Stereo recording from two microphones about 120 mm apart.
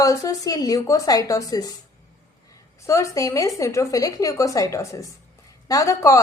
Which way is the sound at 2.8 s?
25° left (ahead or behind).